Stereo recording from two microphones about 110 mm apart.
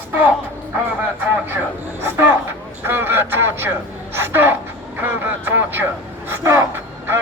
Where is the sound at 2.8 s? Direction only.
20° right (ahead or behind).